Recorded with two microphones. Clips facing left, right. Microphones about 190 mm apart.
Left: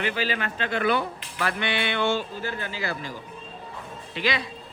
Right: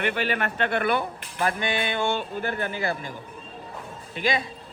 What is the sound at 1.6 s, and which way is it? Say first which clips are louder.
Music: even; 45° right (ahead or behind).